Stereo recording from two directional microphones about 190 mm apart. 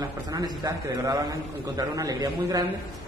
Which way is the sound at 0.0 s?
20° right (ahead or behind).